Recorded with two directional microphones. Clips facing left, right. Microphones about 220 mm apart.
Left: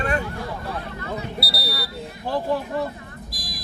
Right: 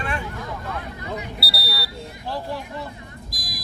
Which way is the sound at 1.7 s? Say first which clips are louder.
Left 2 dB; 50° left (ahead or behind).